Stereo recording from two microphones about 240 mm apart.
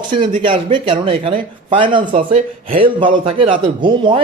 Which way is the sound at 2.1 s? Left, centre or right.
Right.